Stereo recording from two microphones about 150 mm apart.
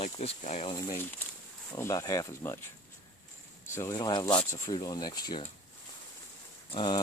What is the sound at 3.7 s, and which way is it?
Speech, 25° left (ahead or behind).